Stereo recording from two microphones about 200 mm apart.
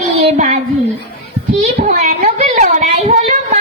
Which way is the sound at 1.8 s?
40° right (ahead or behind).